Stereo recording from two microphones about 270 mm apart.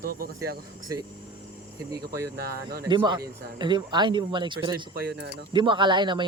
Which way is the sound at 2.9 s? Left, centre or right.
Centre.